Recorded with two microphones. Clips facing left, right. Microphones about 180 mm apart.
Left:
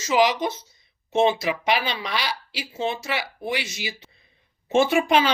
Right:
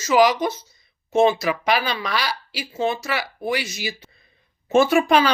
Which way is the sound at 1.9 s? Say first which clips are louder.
Right 3 dB; 20° left (ahead or behind).